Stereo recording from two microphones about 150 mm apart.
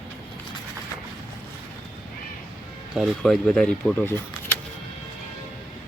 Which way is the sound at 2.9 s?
Centre (ahead or behind).